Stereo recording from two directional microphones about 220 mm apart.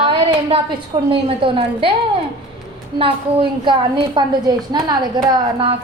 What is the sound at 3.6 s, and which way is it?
A woman's voice, 20° right (ahead or behind).